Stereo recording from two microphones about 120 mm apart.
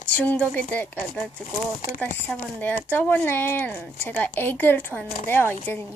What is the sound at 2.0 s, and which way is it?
Speech, 10° left (ahead or behind).